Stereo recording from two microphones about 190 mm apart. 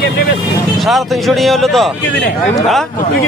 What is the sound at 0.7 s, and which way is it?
Speech, centre (ahead or behind).